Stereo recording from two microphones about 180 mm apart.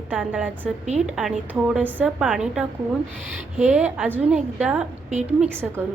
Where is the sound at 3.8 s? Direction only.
10° right (ahead or behind).